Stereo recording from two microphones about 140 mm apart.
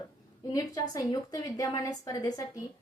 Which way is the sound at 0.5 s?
25° left (ahead or behind).